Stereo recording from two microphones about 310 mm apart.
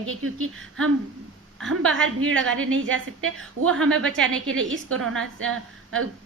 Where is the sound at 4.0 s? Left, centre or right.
Centre.